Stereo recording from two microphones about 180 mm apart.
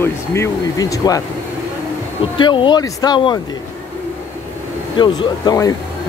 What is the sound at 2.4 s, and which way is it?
Speech, 25° left (ahead or behind).